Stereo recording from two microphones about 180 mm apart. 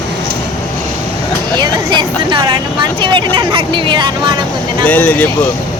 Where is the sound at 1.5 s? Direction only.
25° right (ahead or behind).